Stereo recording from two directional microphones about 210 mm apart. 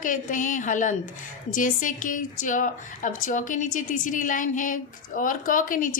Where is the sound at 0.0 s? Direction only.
40° left (ahead or behind).